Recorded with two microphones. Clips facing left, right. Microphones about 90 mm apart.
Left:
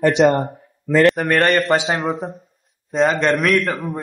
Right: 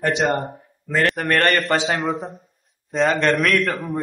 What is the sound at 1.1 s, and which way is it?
A man's voice, centre (ahead or behind).